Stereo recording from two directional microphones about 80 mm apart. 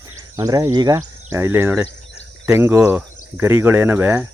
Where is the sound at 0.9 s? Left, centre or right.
Right.